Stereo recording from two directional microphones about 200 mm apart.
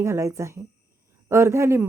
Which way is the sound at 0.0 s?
15° right (ahead or behind).